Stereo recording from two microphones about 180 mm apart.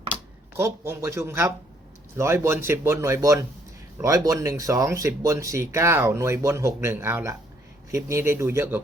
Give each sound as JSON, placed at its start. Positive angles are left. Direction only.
{"t": 0.5, "sound": "speech", "side_deg": -15}